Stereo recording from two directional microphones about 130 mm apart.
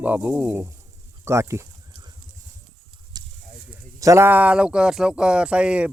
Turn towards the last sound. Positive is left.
turn(degrees=-10)  # may be behind; listen again after turning